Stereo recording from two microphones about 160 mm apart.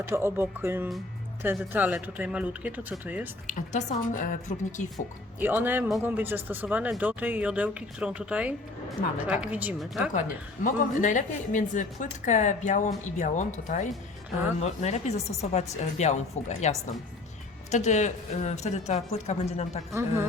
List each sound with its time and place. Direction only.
0.1 s speech: 15° right (ahead or behind)
3.7 s a woman's voice: 50° left (ahead or behind)
5.4 s speech: 10° right (ahead or behind)
10.1 s a woman's voice: 50° left (ahead or behind)
19.9 s speech: 15° right (ahead or behind)